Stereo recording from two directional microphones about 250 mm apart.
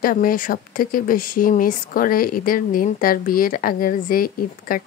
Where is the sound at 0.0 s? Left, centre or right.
Left.